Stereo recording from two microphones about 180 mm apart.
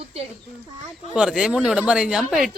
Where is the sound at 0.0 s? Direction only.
35° right (ahead or behind).